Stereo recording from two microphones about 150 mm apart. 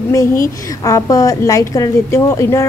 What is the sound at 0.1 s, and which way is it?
A woman's voice, 20° left (ahead or behind).